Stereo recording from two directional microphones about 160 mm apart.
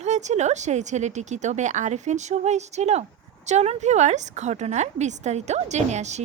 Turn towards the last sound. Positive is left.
turn(degrees=-45)  # may be behind; listen again after turning